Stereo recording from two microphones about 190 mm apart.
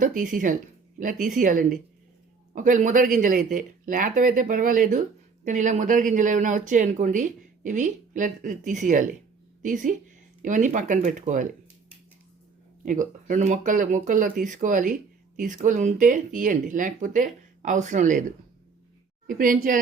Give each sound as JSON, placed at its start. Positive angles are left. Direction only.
{"t": 0.0, "sound": "speech", "side_deg": -45}
{"t": 12.8, "sound": "speech", "side_deg": -45}